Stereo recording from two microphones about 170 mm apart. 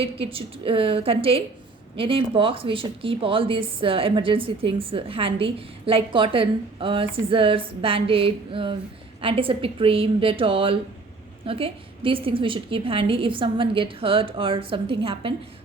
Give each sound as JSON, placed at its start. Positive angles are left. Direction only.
{"t": 0.0, "sound": "speech", "side_deg": -35}